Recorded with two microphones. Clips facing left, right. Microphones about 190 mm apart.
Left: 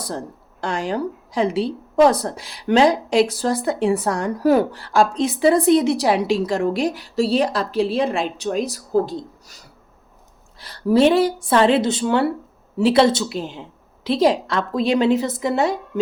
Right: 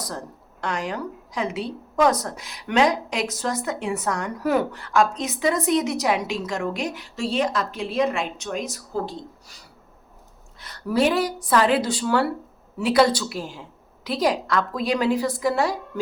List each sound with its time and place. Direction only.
0.0 s a woman's voice: 30° left (ahead or behind)
10.6 s a woman's voice: 30° left (ahead or behind)